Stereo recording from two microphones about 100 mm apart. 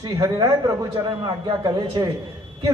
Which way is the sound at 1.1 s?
50° right (ahead or behind).